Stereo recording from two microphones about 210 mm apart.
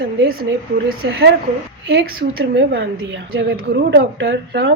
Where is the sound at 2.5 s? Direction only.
55° right (ahead or behind).